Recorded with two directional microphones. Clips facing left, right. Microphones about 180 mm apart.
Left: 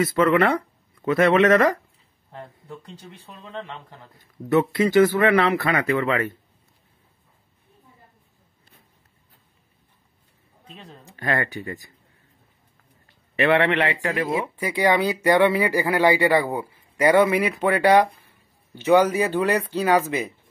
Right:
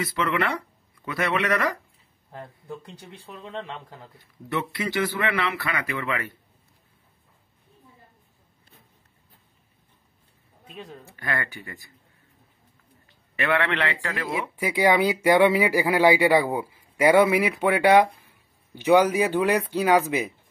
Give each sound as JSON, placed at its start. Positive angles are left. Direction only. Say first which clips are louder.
{"t": 0.0, "sound": "speech", "louder": "left 8 dB", "side_deg": 50}
{"t": 4.2, "sound": "speech", "louder": "left 10 dB", "side_deg": 45}
{"t": 11.1, "sound": "speech", "louder": "left 6 dB", "side_deg": 40}
{"t": 13.4, "sound": "a man's voice", "louder": "left 5 dB", "side_deg": 25}
{"t": 14.5, "sound": "speech", "louder": "right 3 dB", "side_deg": -10}